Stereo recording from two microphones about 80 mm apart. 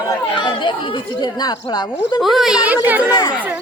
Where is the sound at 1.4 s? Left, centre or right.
Left.